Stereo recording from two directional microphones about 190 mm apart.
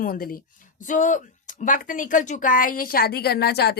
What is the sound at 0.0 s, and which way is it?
A woman's voice, 50° left (ahead or behind).